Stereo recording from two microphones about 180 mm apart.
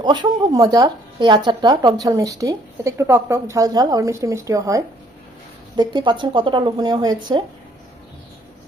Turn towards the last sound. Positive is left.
turn(degrees=-25)  # may be behind; listen again after turning